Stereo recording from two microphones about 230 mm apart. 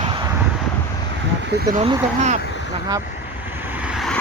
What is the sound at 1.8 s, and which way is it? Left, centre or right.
Speech, right.